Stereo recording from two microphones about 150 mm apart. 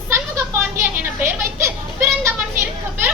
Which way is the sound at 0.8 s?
15° right (ahead or behind).